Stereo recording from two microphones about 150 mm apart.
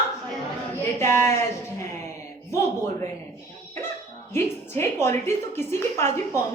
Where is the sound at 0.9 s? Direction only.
20° left (ahead or behind).